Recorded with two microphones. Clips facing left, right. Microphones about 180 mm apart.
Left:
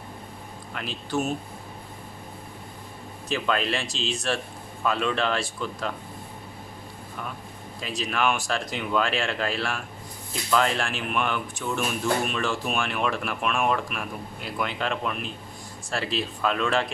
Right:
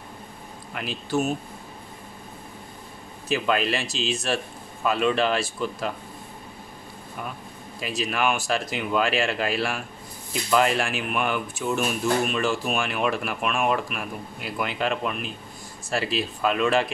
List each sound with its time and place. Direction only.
0.7 s speech: 5° right (ahead or behind)
3.3 s speech: 5° right (ahead or behind)
7.8 s speech: 5° right (ahead or behind)